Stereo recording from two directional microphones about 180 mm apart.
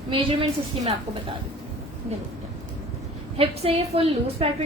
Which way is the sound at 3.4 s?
35° right (ahead or behind).